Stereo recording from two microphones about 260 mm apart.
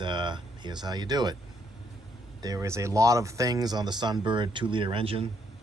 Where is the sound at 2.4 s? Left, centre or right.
Centre.